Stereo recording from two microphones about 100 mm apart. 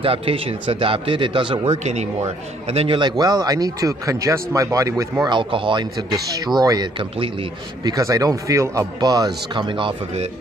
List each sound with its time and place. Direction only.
0.0 s a man's voice: 65° right (ahead or behind)
1.9 s a man's voice: 90° right
3.0 s speech: 45° right (ahead or behind)
5.2 s speech: 50° right (ahead or behind)
6.3 s speech: 40° right (ahead or behind); by 10.2 s 55° right (ahead or behind)